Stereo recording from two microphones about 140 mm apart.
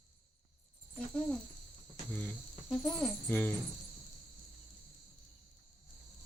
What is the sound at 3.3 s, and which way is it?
Speech, 15° left (ahead or behind).